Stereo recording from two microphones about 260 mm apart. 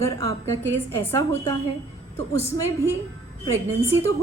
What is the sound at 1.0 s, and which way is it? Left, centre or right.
Speech, centre.